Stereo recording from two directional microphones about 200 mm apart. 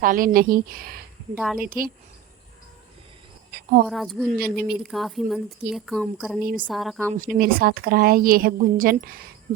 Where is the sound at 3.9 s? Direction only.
Centre (ahead or behind).